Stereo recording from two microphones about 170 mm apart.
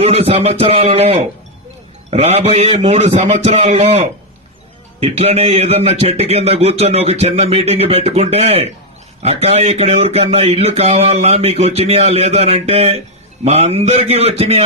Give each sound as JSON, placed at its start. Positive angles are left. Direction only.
{"t": 0.0, "sound": "speech", "side_deg": -35}